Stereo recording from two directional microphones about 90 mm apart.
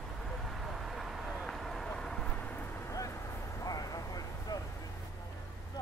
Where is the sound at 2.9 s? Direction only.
35° left (ahead or behind).